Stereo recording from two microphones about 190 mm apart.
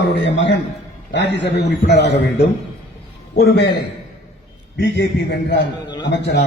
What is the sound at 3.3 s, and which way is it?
Speech, 55° left (ahead or behind).